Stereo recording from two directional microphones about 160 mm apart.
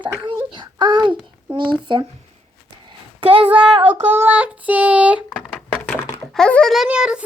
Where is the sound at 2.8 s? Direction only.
35° right (ahead or behind).